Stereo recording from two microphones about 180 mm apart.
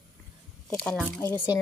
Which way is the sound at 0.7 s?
5° left (ahead or behind).